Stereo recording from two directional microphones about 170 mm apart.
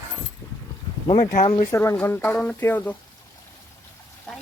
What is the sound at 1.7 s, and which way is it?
Speech, 15° left (ahead or behind).